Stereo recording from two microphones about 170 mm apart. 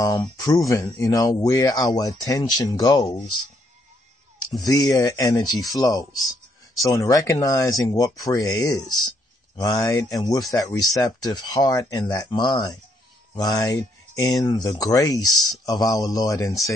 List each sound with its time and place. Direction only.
0.0 s speech: 20° left (ahead or behind)
4.6 s speech: 20° left (ahead or behind)